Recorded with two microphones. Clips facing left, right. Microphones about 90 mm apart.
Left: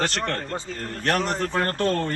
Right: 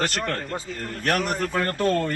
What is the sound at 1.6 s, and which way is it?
Speech, 45° left (ahead or behind).